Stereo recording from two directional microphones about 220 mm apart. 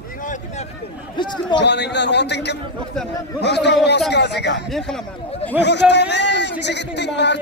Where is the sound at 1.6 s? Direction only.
50° left (ahead or behind).